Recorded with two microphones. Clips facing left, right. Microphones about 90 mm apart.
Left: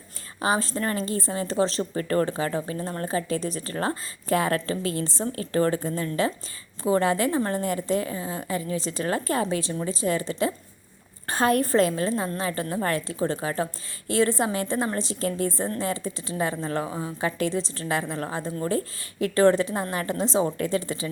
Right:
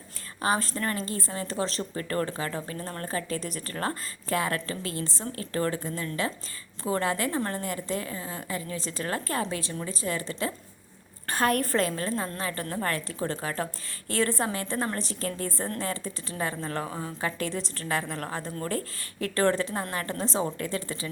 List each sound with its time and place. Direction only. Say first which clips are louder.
0.4 s a woman's voice: left 2 dB; 20° left (ahead or behind)